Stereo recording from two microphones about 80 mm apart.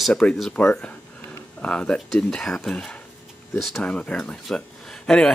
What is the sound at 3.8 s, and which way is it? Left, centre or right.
Speech, centre.